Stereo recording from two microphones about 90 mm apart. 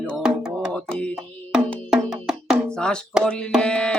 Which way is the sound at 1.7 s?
15° left (ahead or behind).